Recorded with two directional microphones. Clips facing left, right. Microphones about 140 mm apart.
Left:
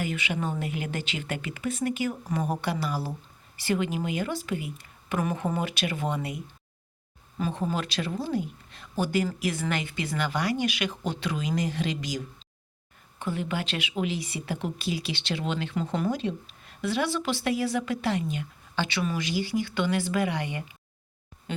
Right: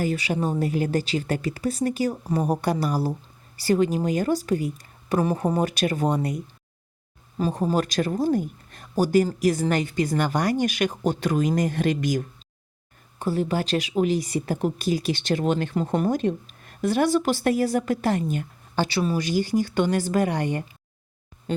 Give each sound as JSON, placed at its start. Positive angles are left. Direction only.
{"t": 0.0, "sound": "speech", "side_deg": -40}
{"t": 13.1, "sound": "speech", "side_deg": -40}